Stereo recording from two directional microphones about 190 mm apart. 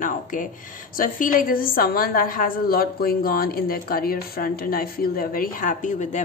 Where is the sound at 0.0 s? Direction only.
45° left (ahead or behind).